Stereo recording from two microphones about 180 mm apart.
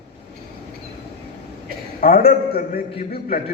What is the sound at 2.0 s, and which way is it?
A man's voice, 55° left (ahead or behind).